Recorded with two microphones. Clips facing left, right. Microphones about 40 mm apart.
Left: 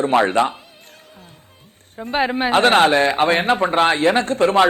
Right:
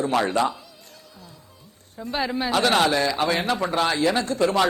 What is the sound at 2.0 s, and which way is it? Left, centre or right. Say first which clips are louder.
A man's voice: left 6 dB; left.